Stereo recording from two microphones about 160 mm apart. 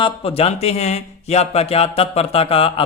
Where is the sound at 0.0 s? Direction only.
35° left (ahead or behind).